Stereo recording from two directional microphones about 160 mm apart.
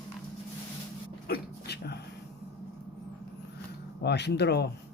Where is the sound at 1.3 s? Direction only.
90° left.